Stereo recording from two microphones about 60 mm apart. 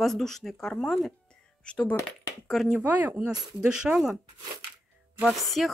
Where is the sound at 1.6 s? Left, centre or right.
Centre.